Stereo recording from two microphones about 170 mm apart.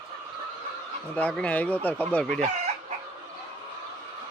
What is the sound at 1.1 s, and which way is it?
Speech, 10° left (ahead or behind).